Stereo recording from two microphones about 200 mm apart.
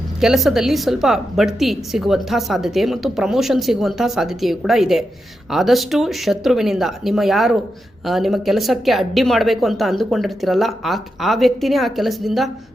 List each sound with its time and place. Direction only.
0.2 s a woman's voice: centre (ahead or behind)